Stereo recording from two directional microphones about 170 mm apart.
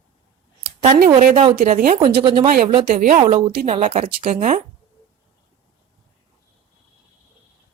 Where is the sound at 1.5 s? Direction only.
45° right (ahead or behind).